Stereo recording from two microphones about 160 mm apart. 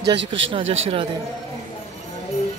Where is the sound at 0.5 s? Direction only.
40° right (ahead or behind).